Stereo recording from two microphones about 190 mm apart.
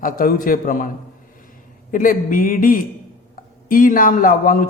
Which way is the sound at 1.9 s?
45° left (ahead or behind).